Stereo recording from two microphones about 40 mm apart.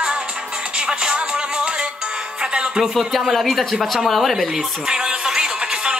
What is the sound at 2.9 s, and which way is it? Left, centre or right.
Speech, centre.